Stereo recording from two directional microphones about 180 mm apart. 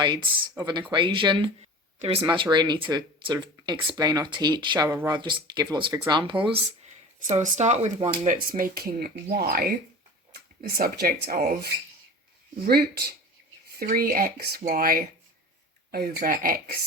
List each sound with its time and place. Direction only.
0.5 s speech: 25° right (ahead or behind)
7.3 s speech: 40° right (ahead or behind)
8.4 s speech: 50° right (ahead or behind)
12.6 s speech: 60° right (ahead or behind)